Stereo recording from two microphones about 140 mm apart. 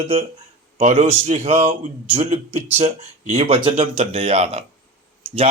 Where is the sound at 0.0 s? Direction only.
45° right (ahead or behind).